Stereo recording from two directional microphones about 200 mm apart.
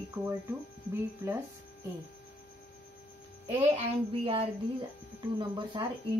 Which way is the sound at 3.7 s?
30° right (ahead or behind).